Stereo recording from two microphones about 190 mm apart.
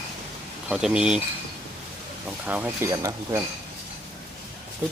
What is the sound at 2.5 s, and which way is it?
Speech, 10° right (ahead or behind).